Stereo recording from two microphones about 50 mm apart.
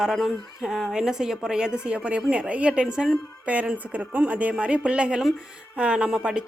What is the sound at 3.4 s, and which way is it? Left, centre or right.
A woman's voice, right.